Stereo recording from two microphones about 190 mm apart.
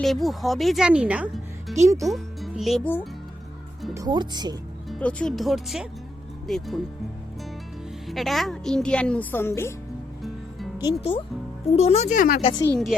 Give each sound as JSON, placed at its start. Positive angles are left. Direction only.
{"t": 0.0, "sound": "a woman's voice", "side_deg": 0}
{"t": 1.7, "sound": "speech", "side_deg": -15}
{"t": 2.0, "sound": "speech", "side_deg": 0}
{"t": 3.9, "sound": "speech", "side_deg": -20}
{"t": 4.9, "sound": "a woman's voice", "side_deg": 5}
{"t": 8.0, "sound": "a woman's voice", "side_deg": 0}
{"t": 10.8, "sound": "speech", "side_deg": 25}
{"t": 12.4, "sound": "speech", "side_deg": 30}
{"t": 12.6, "sound": "a woman's voice", "side_deg": 5}